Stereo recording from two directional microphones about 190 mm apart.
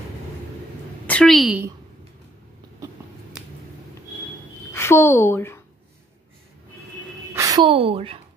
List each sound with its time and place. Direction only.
1.0 s a woman's voice: 5° left (ahead or behind)
4.7 s speech: 15° left (ahead or behind)
7.3 s a woman's voice: 20° right (ahead or behind)